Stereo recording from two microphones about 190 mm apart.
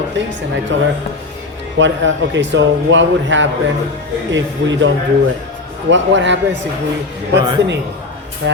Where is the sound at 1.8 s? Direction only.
75° right (ahead or behind).